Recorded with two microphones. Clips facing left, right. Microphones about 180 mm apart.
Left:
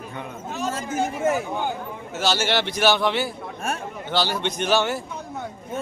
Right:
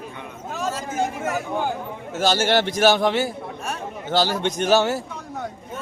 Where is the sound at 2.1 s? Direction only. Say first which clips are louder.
Right 3 dB; 50° right (ahead or behind).